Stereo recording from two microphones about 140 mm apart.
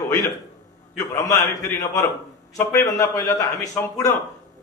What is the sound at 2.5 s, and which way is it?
A man's voice, 20° left (ahead or behind).